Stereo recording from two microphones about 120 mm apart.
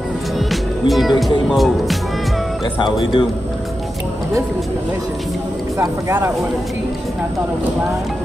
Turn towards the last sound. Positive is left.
turn(degrees=-20)  # may be behind; listen again after turning